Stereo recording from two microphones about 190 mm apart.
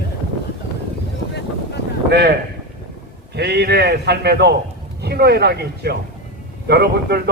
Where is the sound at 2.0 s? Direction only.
60° right (ahead or behind).